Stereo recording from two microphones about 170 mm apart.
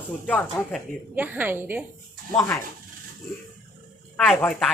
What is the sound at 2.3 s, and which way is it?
Speech, centre (ahead or behind).